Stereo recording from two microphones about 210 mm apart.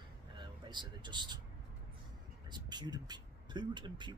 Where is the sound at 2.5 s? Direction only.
20° right (ahead or behind).